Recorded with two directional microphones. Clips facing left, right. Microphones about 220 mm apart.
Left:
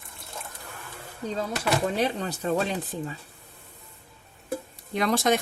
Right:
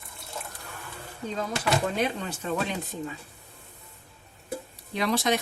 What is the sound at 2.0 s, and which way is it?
Speech, 35° left (ahead or behind).